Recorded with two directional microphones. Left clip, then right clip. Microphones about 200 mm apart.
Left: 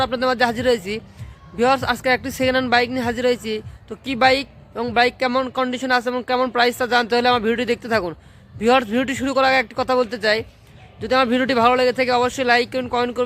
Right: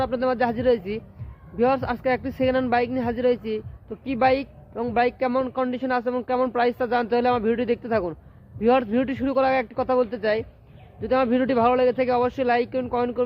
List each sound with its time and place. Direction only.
0.0 s speech: 5° left (ahead or behind)